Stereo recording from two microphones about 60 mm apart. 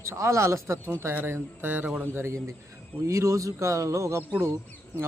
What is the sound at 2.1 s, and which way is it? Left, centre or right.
Speech, right.